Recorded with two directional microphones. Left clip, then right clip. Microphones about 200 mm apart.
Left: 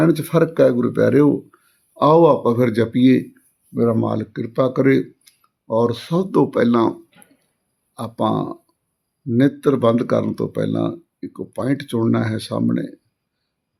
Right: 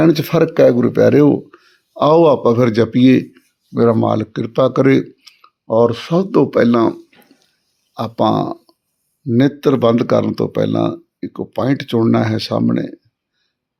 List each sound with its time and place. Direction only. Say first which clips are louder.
0.0 s speech: right 4 dB; 25° right (ahead or behind)
7.9 s speech: right 5 dB; 20° right (ahead or behind)